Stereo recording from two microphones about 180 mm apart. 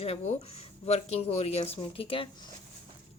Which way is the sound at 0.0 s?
35° left (ahead or behind).